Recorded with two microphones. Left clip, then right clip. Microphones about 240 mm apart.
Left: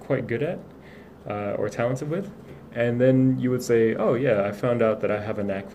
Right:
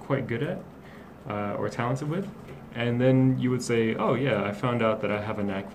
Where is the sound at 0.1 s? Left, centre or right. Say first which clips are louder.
Left 4 dB; right.